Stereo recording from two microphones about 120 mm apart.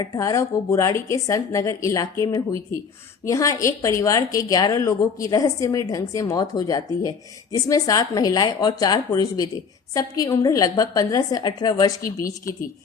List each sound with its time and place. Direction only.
0.0 s a woman's voice: 30° left (ahead or behind)